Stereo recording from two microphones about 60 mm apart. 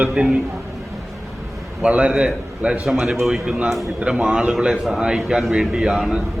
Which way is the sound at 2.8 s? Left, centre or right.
Centre.